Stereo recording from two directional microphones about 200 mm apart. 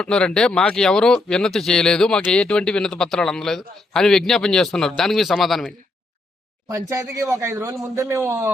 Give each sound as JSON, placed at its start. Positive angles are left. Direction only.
{"t": 0.0, "sound": "speech", "side_deg": 5}
{"t": 6.7, "sound": "a man's voice", "side_deg": -15}